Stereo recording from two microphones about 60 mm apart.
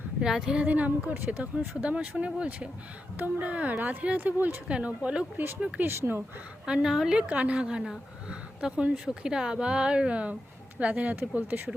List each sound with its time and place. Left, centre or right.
0.2 s speech: centre
5.8 s speech: right
6.8 s a woman's voice: centre; by 11.6 s right